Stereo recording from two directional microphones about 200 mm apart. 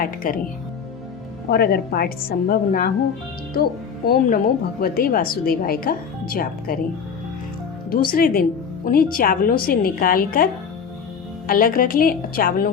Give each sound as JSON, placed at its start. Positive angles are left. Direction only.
{"t": 0.0, "sound": "a woman's voice", "side_deg": 45}
{"t": 1.5, "sound": "a woman's voice", "side_deg": 50}
{"t": 7.9, "sound": "a woman's voice", "side_deg": 45}